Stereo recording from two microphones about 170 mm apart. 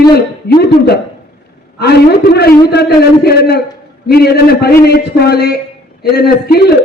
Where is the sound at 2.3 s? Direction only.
70° left (ahead or behind).